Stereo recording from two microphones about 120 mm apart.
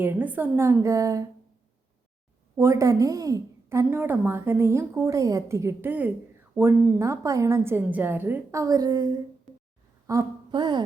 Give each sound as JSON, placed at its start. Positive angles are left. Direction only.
{"t": 0.0, "sound": "a woman's voice", "side_deg": -15}
{"t": 2.6, "sound": "a woman's voice", "side_deg": -25}
{"t": 10.5, "sound": "music", "side_deg": -40}